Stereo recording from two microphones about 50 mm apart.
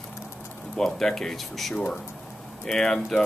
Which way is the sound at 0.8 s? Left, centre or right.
Centre.